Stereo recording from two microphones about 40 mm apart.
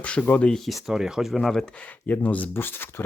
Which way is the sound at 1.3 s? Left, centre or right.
Centre.